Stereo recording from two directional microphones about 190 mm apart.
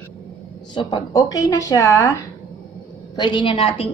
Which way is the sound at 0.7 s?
20° left (ahead or behind).